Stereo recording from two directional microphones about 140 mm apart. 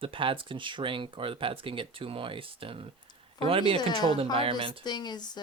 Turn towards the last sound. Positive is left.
turn(degrees=30)  # may be behind; listen again after turning